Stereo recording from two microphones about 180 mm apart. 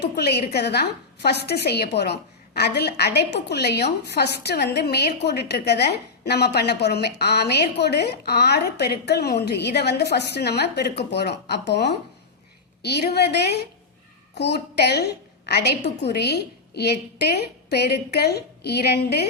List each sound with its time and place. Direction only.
0.0 s a woman's voice: 65° left (ahead or behind)